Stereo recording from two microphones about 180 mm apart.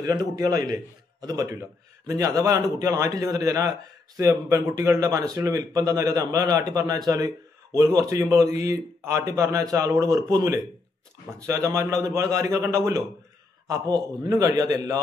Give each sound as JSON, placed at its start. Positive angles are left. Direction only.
{"t": 0.0, "sound": "a man's voice", "side_deg": -20}